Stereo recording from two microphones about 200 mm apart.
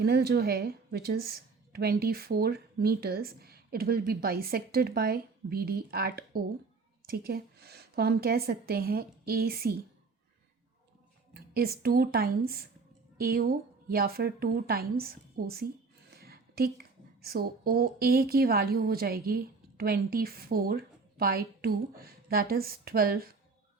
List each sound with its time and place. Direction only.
0.0 s a woman's voice: 50° right (ahead or behind)
11.3 s a woman's voice: 50° right (ahead or behind)
16.0 s a sound: 50° right (ahead or behind)
17.2 s a woman's voice: 50° right (ahead or behind)